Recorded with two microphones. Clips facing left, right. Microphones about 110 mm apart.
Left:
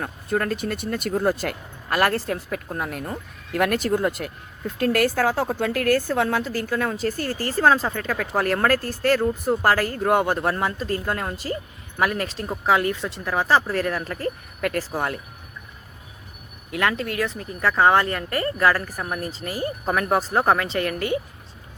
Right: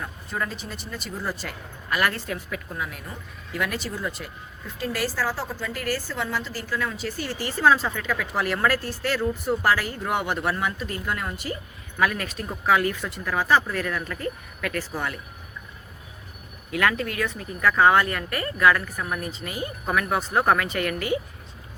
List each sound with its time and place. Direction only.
0.0 s speech: 60° left (ahead or behind); by 15.2 s 40° left (ahead or behind)
16.7 s speech: 30° left (ahead or behind)
20.4 s speech: 30° left (ahead or behind)